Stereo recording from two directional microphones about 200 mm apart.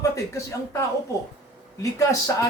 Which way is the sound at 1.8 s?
15° left (ahead or behind).